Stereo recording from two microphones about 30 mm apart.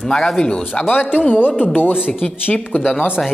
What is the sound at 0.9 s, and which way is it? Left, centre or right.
Speech, left.